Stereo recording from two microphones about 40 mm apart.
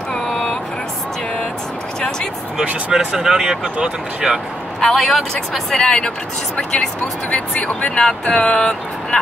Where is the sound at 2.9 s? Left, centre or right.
Centre.